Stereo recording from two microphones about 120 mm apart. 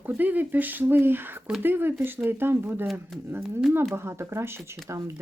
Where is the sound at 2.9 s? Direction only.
Centre (ahead or behind).